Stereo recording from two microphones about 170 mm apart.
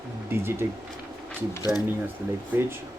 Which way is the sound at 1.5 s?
20° left (ahead or behind).